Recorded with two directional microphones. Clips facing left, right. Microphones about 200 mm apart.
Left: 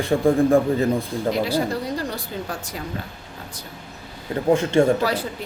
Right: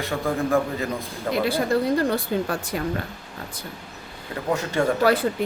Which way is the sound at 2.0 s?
55° right (ahead or behind).